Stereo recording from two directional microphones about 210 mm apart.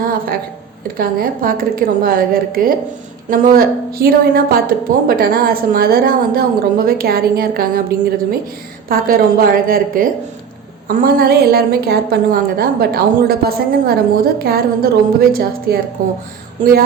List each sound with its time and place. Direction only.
0.0 s a sound: 45° right (ahead or behind)
0.9 s a woman's voice: 45° right (ahead or behind)
8.9 s a woman's voice: 45° right (ahead or behind)